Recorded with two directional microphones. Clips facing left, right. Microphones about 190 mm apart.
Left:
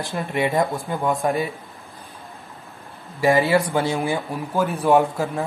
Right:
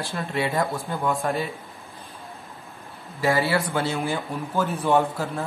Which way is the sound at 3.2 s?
15° left (ahead or behind).